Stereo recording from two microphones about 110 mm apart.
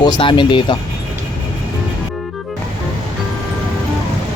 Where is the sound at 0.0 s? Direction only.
45° left (ahead or behind).